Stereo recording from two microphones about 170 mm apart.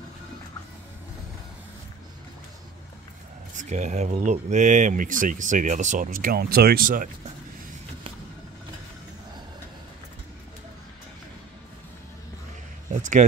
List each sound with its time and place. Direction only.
3.5 s speech: 45° right (ahead or behind)